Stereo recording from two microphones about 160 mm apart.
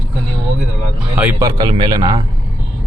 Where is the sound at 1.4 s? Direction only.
25° right (ahead or behind).